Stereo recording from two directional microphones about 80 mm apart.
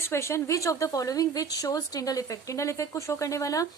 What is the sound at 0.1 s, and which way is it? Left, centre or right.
A woman's voice, left.